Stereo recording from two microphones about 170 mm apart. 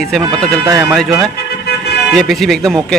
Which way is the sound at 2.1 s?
Centre (ahead or behind).